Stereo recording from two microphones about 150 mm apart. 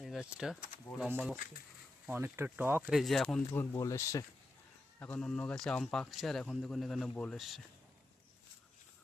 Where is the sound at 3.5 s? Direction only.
20° left (ahead or behind).